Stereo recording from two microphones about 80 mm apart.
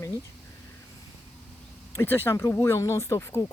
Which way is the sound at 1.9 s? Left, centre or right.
Left.